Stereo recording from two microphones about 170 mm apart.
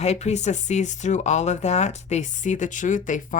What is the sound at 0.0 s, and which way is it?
Speech, 40° left (ahead or behind).